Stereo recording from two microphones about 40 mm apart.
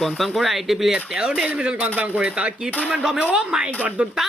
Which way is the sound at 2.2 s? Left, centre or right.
Right.